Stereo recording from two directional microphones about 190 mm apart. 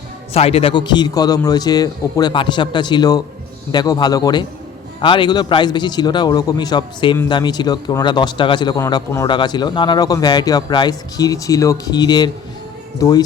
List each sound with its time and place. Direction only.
0.3 s a man's voice: 30° left (ahead or behind)